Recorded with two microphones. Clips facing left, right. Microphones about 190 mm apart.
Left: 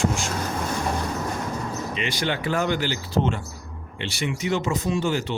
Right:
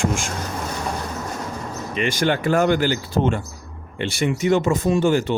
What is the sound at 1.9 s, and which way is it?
Speech, 50° right (ahead or behind).